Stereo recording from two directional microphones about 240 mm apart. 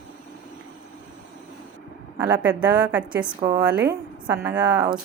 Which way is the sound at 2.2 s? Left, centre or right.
Centre.